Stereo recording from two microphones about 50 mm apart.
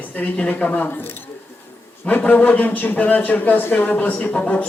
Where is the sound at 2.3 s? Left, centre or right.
Left.